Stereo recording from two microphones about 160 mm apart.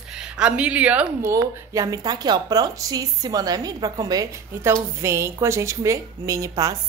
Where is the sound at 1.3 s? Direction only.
20° right (ahead or behind).